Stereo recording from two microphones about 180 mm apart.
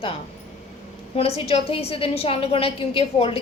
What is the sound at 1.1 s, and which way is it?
A woman's voice, 35° left (ahead or behind).